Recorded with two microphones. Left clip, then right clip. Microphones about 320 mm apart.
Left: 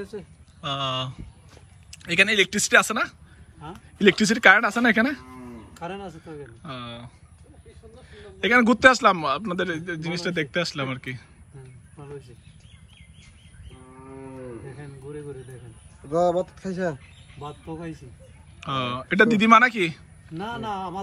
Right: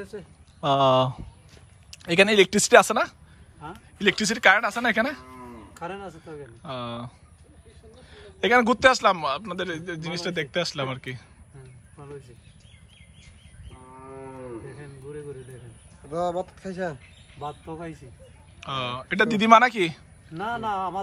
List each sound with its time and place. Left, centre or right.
0.0 s a man's voice: centre
8.1 s a man's voice: centre
14.8 s a man's voice: centre
16.1 s speech: left
17.4 s a man's voice: centre